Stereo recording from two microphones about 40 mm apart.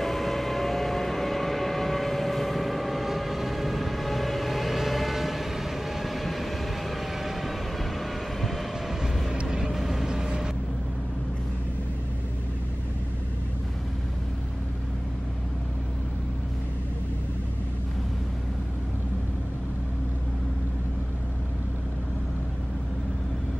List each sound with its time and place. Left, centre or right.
0.0 s civil defense siren: centre
8.0 s vehicle: centre